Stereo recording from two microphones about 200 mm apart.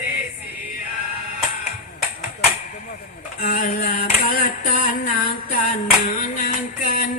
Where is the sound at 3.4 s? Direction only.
45° left (ahead or behind).